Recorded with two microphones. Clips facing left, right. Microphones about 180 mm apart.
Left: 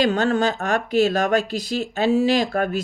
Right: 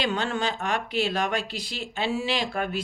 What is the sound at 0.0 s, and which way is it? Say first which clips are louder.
Speech: left 8 dB; 45° left (ahead or behind).